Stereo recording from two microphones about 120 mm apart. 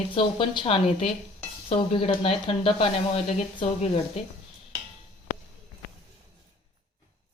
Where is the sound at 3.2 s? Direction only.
75° left (ahead or behind).